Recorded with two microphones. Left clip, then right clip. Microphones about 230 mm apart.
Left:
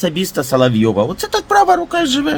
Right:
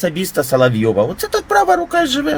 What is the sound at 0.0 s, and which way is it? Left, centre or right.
Speech, centre.